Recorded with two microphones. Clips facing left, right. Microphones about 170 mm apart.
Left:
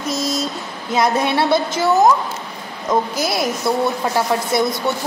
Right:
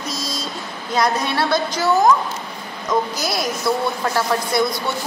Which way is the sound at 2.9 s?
25° left (ahead or behind).